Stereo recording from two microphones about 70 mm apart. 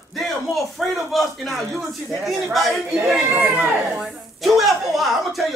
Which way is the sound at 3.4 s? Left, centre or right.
Right.